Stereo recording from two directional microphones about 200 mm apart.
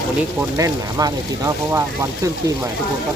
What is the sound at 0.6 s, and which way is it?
Speech, 15° right (ahead or behind).